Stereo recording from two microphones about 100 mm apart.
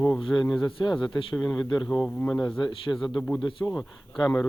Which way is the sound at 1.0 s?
50° left (ahead or behind).